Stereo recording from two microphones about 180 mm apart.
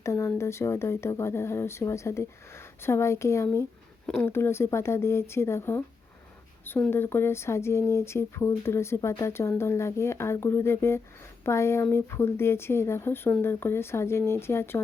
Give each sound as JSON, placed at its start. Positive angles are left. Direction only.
{"t": 0.0, "sound": "speech", "side_deg": 15}